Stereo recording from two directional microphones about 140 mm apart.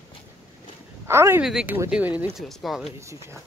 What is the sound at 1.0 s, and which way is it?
Speech, 20° right (ahead or behind).